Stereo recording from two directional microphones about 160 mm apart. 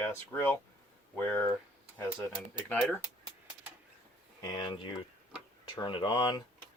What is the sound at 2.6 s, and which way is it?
Speech, 10° left (ahead or behind).